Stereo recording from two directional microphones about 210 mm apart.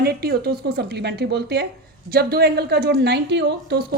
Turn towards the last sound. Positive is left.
turn(degrees=-55)  # may be behind; listen again after turning